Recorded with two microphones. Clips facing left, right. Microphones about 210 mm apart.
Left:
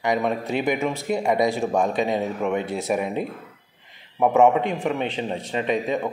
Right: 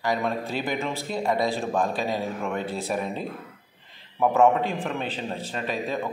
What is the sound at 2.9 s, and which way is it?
Speech, 10° left (ahead or behind).